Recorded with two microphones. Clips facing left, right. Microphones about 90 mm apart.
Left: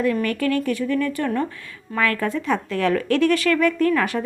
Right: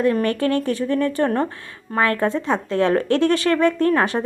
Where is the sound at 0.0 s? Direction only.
35° right (ahead or behind).